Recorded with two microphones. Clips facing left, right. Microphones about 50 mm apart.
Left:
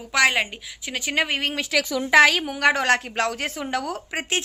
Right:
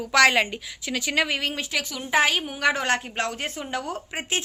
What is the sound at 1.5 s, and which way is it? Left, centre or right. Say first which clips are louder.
A woman's voice: left 6 dB; left.